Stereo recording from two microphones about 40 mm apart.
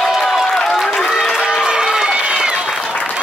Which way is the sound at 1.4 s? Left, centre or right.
Centre.